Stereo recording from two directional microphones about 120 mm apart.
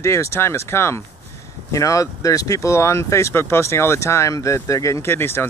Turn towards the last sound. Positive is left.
turn(degrees=20)  # may be behind; listen again after turning